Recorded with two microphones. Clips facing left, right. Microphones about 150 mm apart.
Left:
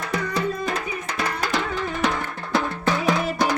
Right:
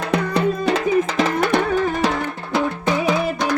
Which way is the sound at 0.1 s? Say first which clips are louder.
Right 6 dB; 65° right (ahead or behind).